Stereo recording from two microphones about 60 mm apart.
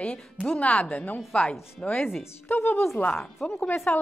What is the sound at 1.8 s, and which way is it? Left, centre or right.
Speech, left.